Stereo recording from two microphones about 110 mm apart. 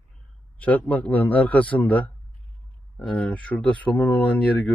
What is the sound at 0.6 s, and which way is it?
Speech, 15° left (ahead or behind).